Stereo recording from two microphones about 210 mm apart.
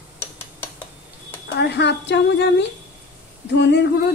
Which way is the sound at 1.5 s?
55° left (ahead or behind).